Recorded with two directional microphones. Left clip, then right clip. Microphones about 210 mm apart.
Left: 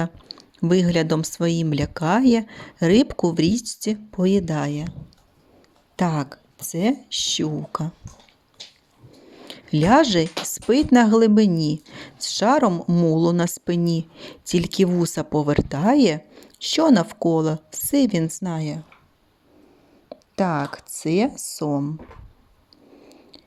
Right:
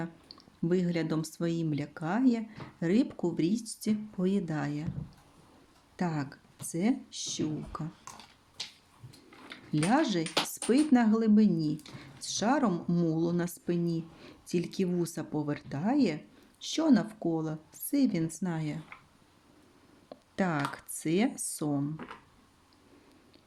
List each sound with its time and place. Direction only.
0.0 s speech: 30° left (ahead or behind)
6.0 s speech: 35° left (ahead or behind)
9.5 s speech: 40° left (ahead or behind)
20.1 s speech: 20° left (ahead or behind)